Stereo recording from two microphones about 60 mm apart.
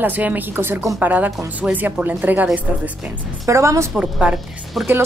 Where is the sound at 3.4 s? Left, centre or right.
Right.